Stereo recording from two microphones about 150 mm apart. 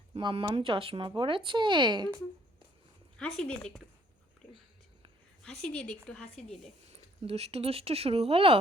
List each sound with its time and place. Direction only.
0.1 s speech: 35° right (ahead or behind)
3.2 s speech: 5° left (ahead or behind)
5.4 s a woman's voice: 5° left (ahead or behind)
7.2 s speech: 40° right (ahead or behind)